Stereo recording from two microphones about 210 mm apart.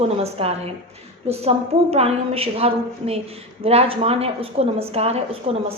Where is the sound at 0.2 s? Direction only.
30° right (ahead or behind).